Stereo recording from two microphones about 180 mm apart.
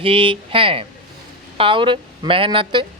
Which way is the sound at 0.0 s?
30° right (ahead or behind).